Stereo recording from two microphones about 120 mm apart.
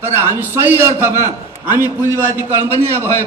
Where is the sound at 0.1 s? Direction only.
20° right (ahead or behind).